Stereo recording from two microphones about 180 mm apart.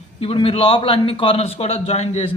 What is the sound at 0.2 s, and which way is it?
A man's voice, 30° left (ahead or behind).